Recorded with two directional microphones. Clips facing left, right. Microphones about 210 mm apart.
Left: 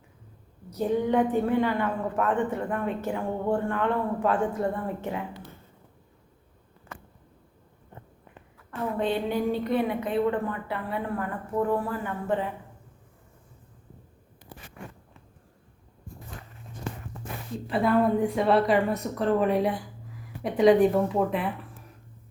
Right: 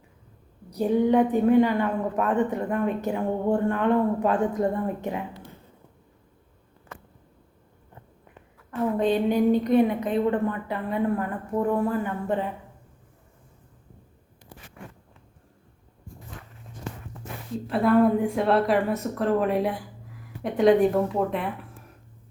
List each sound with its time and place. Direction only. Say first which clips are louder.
0.7 s a woman's voice: right 4 dB; 15° right (ahead or behind)
9.0 s a woman's voice: right 5 dB; 15° right (ahead or behind)
17.7 s a woman's voice: right 3 dB; centre (ahead or behind)